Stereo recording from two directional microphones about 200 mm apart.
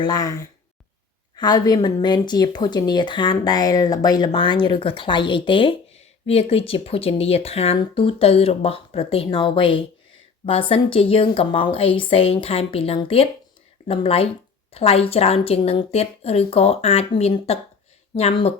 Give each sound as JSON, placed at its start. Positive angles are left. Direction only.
{"t": 0.0, "sound": "a woman's voice", "side_deg": 15}